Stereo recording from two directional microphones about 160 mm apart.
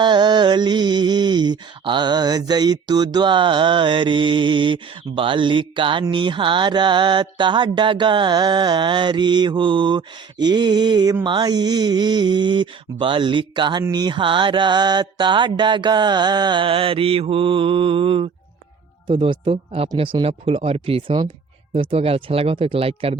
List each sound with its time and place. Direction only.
0.0 s mantra: 30° right (ahead or behind)
19.0 s speech: 30° right (ahead or behind)